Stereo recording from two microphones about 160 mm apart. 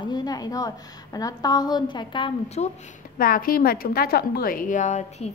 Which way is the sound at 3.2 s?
60° left (ahead or behind).